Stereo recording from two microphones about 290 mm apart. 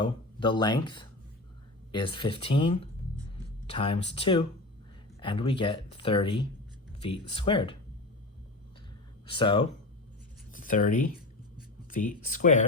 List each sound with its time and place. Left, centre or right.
0.0 s speech: centre
9.3 s speech: centre
10.5 s speech: left